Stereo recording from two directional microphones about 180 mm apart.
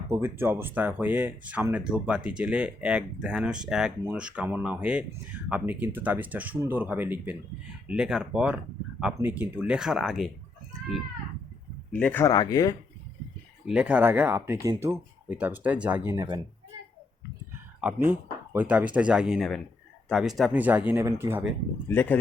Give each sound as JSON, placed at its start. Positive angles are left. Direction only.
{"t": 0.1, "sound": "speech", "side_deg": -10}
{"t": 11.9, "sound": "speech", "side_deg": 5}
{"t": 12.3, "sound": "speech", "side_deg": 20}
{"t": 13.7, "sound": "speech", "side_deg": -5}
{"t": 17.7, "sound": "speech", "side_deg": -10}
{"t": 21.8, "sound": "speech", "side_deg": 10}